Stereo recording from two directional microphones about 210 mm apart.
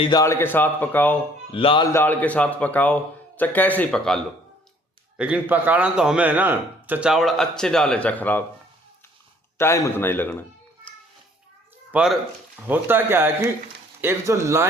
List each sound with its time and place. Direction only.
0.0 s a man's voice: 20° left (ahead or behind)
1.5 s a man's voice: 25° left (ahead or behind)
1.9 s a man's voice: 10° left (ahead or behind)
9.6 s a man's voice: 15° left (ahead or behind)
11.9 s speech: 5° right (ahead or behind)